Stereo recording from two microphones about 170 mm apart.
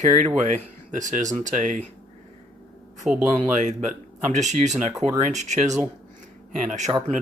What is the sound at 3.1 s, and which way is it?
Speech, 5° right (ahead or behind).